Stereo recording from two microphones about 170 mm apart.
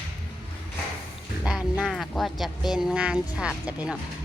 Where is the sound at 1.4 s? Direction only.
5° right (ahead or behind).